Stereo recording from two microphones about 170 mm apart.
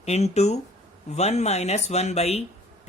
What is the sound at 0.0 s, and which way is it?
Speech, 40° left (ahead or behind).